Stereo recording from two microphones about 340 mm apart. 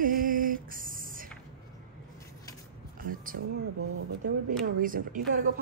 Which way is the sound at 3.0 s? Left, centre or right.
Right.